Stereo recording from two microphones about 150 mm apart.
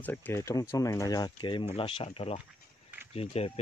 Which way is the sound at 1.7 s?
40° left (ahead or behind).